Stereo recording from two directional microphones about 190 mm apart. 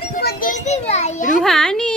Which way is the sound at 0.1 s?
50° left (ahead or behind).